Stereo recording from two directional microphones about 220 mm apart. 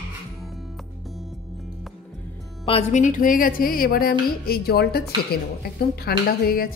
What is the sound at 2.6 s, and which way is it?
A woman's voice, 25° left (ahead or behind).